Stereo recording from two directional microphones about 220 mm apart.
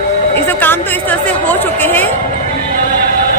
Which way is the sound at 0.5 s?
10° left (ahead or behind).